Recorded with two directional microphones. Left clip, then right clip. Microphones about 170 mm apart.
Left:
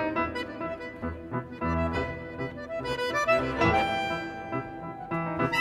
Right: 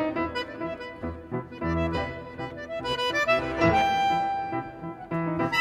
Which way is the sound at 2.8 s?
Centre (ahead or behind).